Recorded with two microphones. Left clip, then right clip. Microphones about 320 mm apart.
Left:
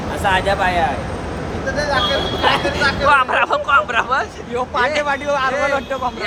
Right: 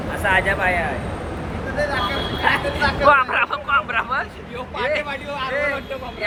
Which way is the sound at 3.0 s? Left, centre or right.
Centre.